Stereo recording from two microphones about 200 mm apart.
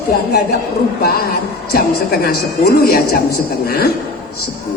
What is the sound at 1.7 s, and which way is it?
A woman's voice, 50° left (ahead or behind).